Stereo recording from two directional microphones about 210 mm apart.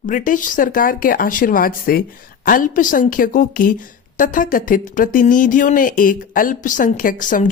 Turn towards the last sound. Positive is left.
turn(degrees=40)  # may be behind; listen again after turning